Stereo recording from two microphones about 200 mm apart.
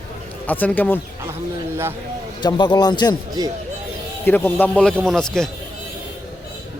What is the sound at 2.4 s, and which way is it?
Speech, 20° left (ahead or behind).